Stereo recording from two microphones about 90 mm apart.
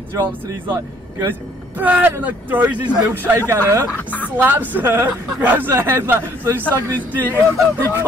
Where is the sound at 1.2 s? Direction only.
20° right (ahead or behind).